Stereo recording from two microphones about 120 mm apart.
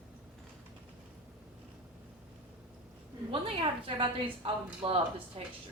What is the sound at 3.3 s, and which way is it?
A woman's voice, 45° right (ahead or behind).